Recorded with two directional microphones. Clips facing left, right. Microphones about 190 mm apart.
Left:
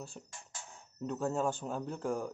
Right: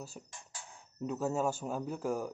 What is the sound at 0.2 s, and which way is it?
Speech, 5° right (ahead or behind).